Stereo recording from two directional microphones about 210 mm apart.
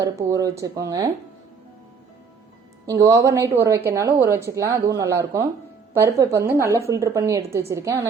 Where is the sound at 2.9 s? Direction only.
15° right (ahead or behind).